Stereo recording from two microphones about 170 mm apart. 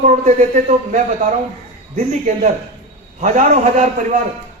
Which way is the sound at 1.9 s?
45° right (ahead or behind).